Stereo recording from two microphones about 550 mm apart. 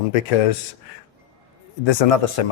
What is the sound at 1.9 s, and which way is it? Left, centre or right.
Speech, left.